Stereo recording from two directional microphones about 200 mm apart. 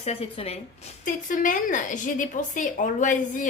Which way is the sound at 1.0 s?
40° left (ahead or behind).